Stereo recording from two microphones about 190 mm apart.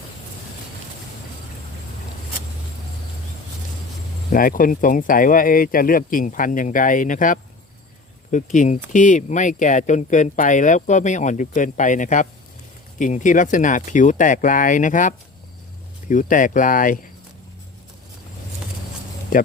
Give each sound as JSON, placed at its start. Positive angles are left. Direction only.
{"t": 4.3, "sound": "speech", "side_deg": 45}
{"t": 19.3, "sound": "speech", "side_deg": 45}